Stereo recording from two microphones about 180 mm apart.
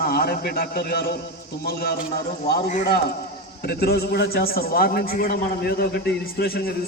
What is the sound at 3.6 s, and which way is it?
A man's voice, 60° left (ahead or behind).